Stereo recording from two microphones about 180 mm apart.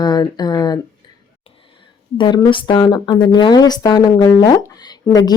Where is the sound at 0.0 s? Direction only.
25° left (ahead or behind).